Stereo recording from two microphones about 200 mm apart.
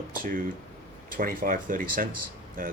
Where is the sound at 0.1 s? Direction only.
45° right (ahead or behind).